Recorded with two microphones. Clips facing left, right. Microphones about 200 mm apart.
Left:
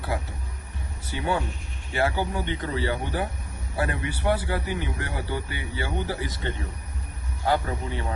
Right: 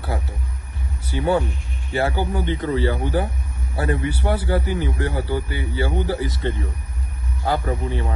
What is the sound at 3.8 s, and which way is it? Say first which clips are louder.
A man's voice: right 5 dB; 30° right (ahead or behind).